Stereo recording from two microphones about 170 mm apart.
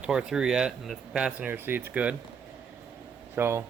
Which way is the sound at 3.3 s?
15° right (ahead or behind).